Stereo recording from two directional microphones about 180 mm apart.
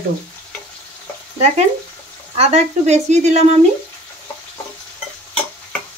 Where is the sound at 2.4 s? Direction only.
35° right (ahead or behind).